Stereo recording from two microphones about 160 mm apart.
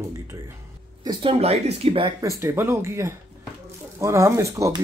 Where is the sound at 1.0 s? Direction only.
35° right (ahead or behind).